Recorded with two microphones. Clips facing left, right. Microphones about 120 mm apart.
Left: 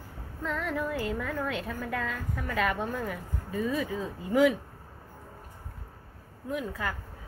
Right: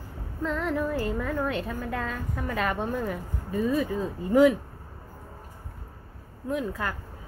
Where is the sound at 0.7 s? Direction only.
45° right (ahead or behind).